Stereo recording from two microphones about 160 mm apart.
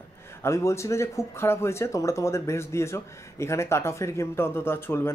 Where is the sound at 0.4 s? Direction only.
15° left (ahead or behind).